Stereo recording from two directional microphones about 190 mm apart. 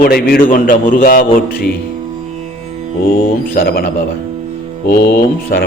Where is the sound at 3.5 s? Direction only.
50° left (ahead or behind).